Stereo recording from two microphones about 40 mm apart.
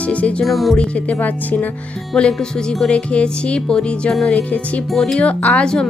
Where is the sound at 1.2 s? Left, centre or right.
Left.